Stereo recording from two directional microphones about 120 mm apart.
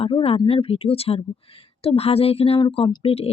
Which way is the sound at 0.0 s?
55° left (ahead or behind).